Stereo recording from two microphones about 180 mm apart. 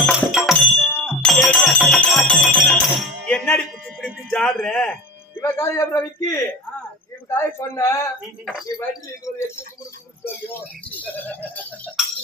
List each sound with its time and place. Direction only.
0.0 s music: centre (ahead or behind)
5.4 s a man's voice: 15° left (ahead or behind)
10.9 s a man's voice: 10° left (ahead or behind)
12.0 s tick-tock: centre (ahead or behind)